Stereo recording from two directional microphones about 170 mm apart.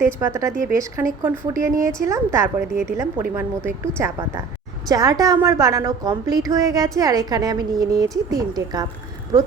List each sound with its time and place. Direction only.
0.0 s a woman's voice: 15° right (ahead or behind)